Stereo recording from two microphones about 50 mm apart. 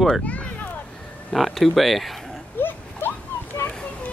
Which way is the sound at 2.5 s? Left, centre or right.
Left.